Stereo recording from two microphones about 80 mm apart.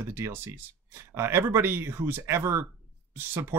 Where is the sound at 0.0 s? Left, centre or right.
Right.